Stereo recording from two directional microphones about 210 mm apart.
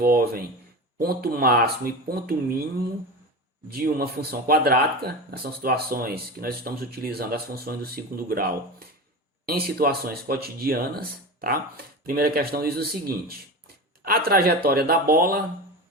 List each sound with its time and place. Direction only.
0.0 s speech: 45° right (ahead or behind)
3.7 s speech: 45° right (ahead or behind)